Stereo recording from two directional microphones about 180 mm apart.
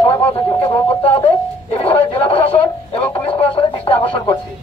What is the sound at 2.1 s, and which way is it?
Radio, 30° left (ahead or behind).